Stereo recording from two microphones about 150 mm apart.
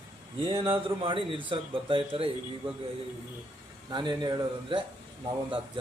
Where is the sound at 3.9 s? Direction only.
30° right (ahead or behind).